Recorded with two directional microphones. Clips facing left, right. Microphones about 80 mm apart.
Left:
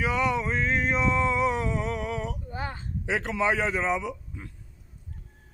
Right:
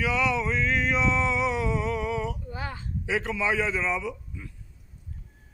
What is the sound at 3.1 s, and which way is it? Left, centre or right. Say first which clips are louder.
A man's voice: left 1 dB; left.